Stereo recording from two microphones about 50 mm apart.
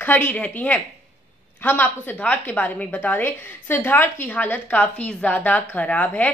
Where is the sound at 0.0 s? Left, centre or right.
Left.